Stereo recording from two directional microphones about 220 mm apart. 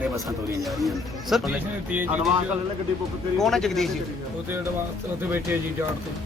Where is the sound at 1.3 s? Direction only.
Centre (ahead or behind).